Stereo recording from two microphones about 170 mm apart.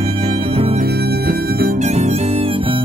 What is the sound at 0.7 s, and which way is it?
Harmonica, 70° right (ahead or behind).